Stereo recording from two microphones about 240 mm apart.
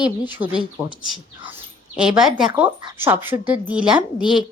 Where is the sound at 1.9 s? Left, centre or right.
Centre.